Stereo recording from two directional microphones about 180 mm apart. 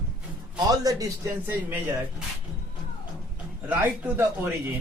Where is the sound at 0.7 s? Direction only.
20° right (ahead or behind).